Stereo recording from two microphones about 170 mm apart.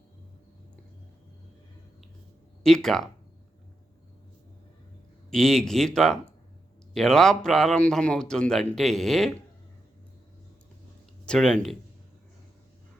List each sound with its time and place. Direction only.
2.6 s a man's voice: centre (ahead or behind)
5.3 s a man's voice: centre (ahead or behind)
11.3 s a man's voice: 5° left (ahead or behind)